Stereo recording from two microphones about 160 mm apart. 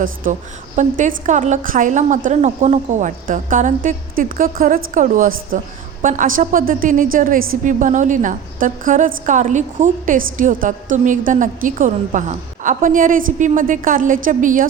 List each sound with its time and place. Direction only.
0.8 s a woman's voice: 55° right (ahead or behind)